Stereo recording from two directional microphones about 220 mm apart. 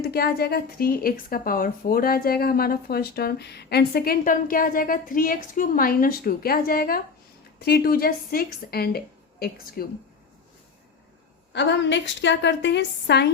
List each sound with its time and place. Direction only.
0.0 s speech: 45° left (ahead or behind)
11.5 s speech: 50° left (ahead or behind)